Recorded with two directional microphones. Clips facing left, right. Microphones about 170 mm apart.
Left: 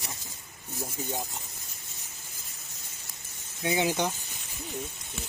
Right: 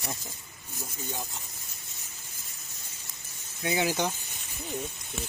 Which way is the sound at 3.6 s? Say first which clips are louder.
Left 1 dB; 20° left (ahead or behind).